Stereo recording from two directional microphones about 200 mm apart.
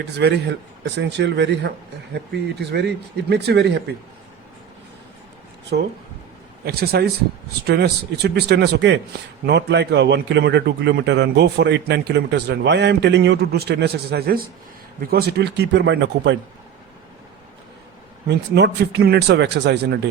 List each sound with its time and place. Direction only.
0.0 s a man's voice: 55° right (ahead or behind)
5.7 s a man's voice: 50° right (ahead or behind)
18.3 s a man's voice: 60° right (ahead or behind)